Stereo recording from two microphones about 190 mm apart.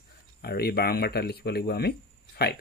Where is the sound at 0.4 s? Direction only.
55° left (ahead or behind).